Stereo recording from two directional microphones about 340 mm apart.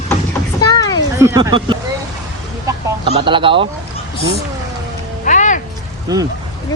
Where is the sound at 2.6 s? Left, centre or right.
Centre.